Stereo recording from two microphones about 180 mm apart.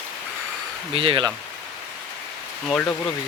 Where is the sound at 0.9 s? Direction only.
30° right (ahead or behind).